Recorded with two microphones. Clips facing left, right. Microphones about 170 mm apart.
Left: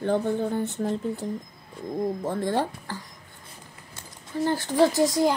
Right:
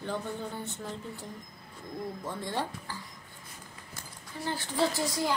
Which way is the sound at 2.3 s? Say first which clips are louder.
Left 6 dB; 50° left (ahead or behind).